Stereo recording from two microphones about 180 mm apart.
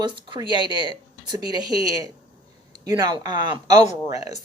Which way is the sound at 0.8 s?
25° right (ahead or behind).